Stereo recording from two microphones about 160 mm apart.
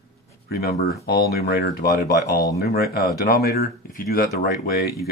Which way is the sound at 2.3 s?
20° left (ahead or behind).